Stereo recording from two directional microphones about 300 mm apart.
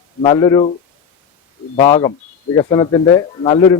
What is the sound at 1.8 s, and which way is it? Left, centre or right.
Speech, centre.